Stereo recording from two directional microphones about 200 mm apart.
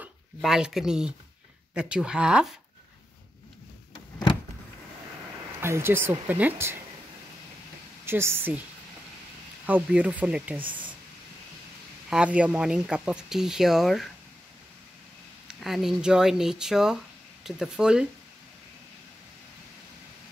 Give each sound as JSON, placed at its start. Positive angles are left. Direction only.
{"t": 0.0, "sound": "speech", "side_deg": 0}
{"t": 3.9, "sound": "a sound", "side_deg": 25}
{"t": 5.6, "sound": "speech", "side_deg": -10}
{"t": 8.0, "sound": "speech", "side_deg": -10}
{"t": 9.7, "sound": "speech", "side_deg": -5}
{"t": 10.6, "sound": "speech", "side_deg": -25}
{"t": 12.1, "sound": "speech", "side_deg": -5}
{"t": 15.6, "sound": "speech", "side_deg": 0}